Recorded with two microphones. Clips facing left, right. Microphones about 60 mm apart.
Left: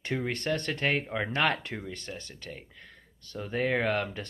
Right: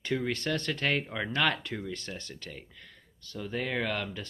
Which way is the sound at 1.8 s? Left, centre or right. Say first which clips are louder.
Right 1 dB; left.